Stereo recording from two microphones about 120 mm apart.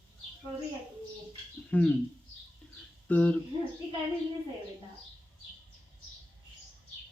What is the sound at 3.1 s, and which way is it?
Speech, 10° left (ahead or behind).